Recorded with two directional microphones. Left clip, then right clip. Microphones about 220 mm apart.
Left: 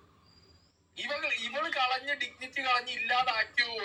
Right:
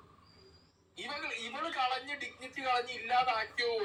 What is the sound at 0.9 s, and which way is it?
Speech, 25° left (ahead or behind).